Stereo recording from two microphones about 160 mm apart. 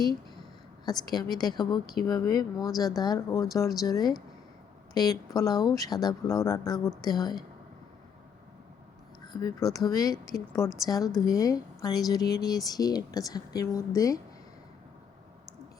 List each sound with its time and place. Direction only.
0.9 s a woman's voice: 25° left (ahead or behind)
9.2 s a woman's voice: 25° left (ahead or behind)